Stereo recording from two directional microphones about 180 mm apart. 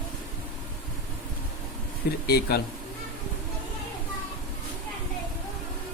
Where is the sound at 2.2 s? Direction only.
60° left (ahead or behind).